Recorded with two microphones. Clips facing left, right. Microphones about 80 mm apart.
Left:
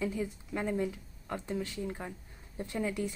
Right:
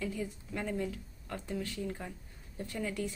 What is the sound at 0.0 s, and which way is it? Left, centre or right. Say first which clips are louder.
Speech: left 3 dB; centre.